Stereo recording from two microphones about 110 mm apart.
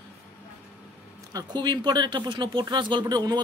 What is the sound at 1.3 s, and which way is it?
Speech, 40° right (ahead or behind).